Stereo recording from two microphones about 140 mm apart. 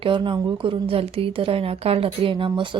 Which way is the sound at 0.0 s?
35° right (ahead or behind).